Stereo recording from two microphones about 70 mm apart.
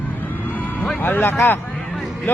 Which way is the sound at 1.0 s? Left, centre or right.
Left.